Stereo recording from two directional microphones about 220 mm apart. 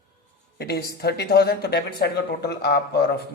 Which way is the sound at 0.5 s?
45° left (ahead or behind).